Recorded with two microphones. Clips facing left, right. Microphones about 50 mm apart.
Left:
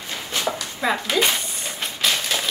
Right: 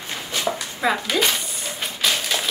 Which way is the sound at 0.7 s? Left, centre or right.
Centre.